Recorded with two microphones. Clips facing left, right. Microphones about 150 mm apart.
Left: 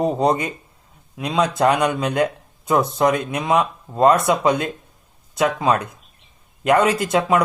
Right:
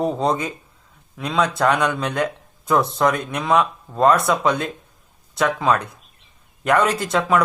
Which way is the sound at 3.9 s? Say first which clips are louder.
Left 1 dB; 25° left (ahead or behind).